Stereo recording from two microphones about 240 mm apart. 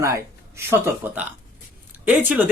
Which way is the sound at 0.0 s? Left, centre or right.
Centre.